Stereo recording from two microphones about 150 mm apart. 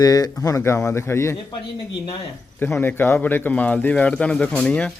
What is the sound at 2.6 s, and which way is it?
Speech, 15° left (ahead or behind).